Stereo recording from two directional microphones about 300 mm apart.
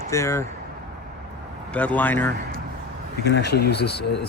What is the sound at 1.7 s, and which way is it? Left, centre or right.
Speech, centre.